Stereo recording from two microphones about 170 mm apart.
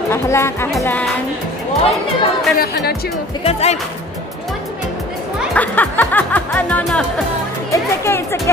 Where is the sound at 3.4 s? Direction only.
40° left (ahead or behind).